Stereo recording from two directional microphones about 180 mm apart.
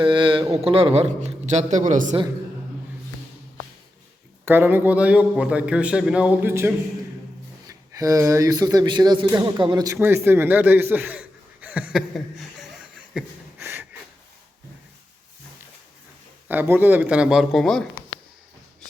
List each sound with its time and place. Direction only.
0.0 s a man's voice: 25° right (ahead or behind); by 2.1 s 45° right (ahead or behind)
4.4 s a man's voice: 10° right (ahead or behind)
13.6 s a sound: 15° right (ahead or behind)
16.5 s a man's voice: 10° right (ahead or behind)